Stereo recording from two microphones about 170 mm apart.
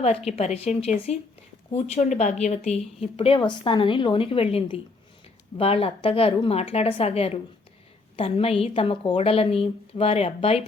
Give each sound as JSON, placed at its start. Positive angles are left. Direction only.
{"t": 0.3, "sound": "a woman's voice", "side_deg": 35}